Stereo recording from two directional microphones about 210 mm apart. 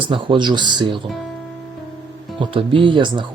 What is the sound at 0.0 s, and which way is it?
Speech, 25° right (ahead or behind).